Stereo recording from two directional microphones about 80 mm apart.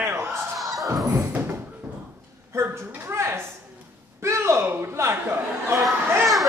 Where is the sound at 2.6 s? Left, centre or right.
Right.